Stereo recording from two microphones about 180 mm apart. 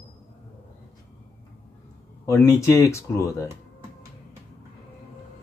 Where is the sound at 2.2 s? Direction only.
15° left (ahead or behind).